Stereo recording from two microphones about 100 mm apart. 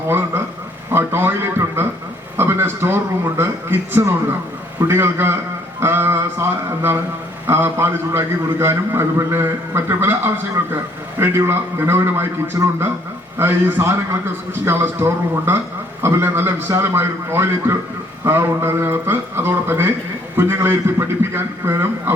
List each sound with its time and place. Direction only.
0.1 s a man's voice: 25° right (ahead or behind)